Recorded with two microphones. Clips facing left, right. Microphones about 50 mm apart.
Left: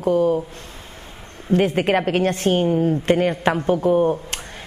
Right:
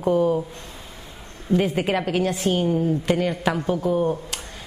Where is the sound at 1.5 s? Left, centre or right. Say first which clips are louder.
Left 3 dB; left.